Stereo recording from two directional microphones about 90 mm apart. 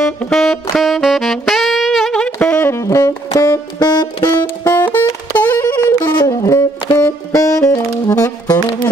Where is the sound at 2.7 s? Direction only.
35° left (ahead or behind).